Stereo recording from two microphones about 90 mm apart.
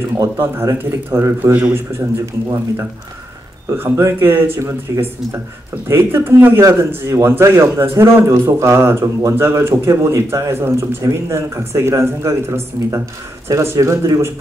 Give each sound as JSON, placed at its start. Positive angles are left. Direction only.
{"t": 0.7, "sound": "a man's voice", "side_deg": -35}
{"t": 1.4, "sound": "speech", "side_deg": -25}
{"t": 3.7, "sound": "a man's voice", "side_deg": -30}